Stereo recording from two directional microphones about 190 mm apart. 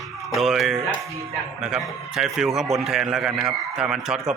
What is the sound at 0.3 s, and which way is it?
A man's voice, centre (ahead or behind).